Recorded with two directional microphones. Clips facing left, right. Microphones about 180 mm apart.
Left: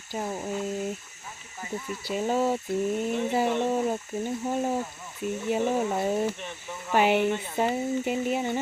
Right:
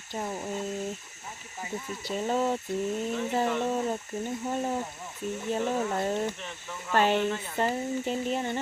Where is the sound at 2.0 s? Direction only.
5° left (ahead or behind).